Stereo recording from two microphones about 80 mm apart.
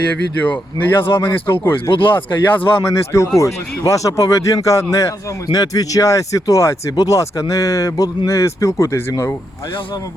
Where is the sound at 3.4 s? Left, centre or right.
Left.